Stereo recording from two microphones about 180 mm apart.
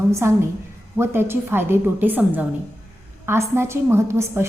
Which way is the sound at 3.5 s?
15° right (ahead or behind).